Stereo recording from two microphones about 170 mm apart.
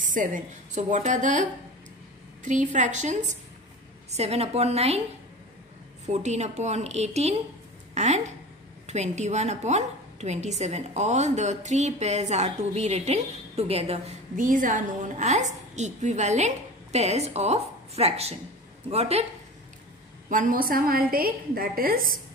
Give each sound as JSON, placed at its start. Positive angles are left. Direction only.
{"t": 0.0, "sound": "a woman's voice", "side_deg": -50}
{"t": 6.0, "sound": "a woman's voice", "side_deg": -40}
{"t": 14.3, "sound": "a woman's voice", "side_deg": -50}
{"t": 20.2, "sound": "a woman's voice", "side_deg": -50}